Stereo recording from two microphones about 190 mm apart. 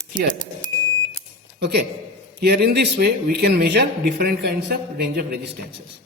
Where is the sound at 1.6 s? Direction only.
60° right (ahead or behind).